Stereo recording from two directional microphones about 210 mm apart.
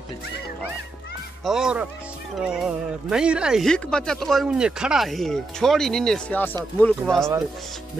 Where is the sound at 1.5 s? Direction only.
5° right (ahead or behind).